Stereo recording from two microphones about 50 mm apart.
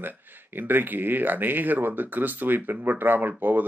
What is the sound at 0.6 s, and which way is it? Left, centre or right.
Speech, right.